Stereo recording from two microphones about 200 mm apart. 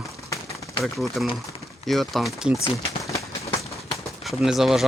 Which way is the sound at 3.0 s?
15° left (ahead or behind).